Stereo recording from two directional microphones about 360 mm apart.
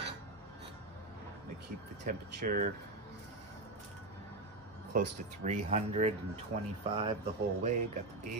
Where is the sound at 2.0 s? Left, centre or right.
Right.